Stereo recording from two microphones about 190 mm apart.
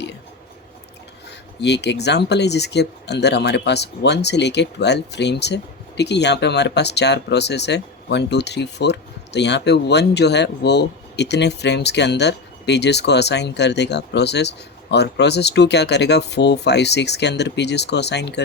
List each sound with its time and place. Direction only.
1.6 s speech: 65° left (ahead or behind)